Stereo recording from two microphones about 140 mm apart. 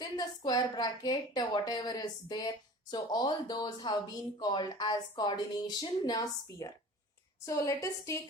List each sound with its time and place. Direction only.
0.0 s a woman's voice: 30° left (ahead or behind)